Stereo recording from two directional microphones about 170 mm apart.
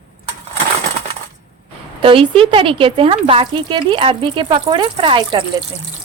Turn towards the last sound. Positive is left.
turn(degrees=-30)  # may be behind; listen again after turning